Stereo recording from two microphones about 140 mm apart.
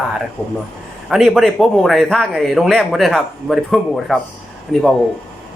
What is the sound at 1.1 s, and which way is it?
Speech, centre (ahead or behind).